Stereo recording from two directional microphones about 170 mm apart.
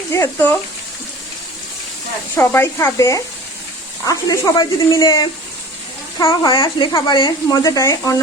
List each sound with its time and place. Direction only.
0.1 s speech: 15° left (ahead or behind)
2.3 s speech: 15° left (ahead or behind)